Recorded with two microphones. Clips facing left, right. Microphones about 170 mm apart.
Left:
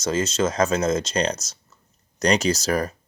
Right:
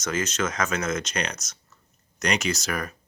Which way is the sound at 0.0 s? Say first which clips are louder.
Left 5 dB; 30° left (ahead or behind).